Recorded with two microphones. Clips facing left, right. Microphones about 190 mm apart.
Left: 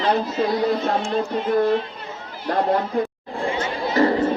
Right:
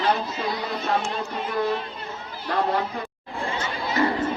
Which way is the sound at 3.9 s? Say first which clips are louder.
Left 5 dB; 35° left (ahead or behind).